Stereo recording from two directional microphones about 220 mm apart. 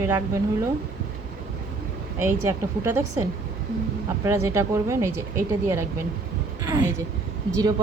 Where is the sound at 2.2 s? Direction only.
10° right (ahead or behind).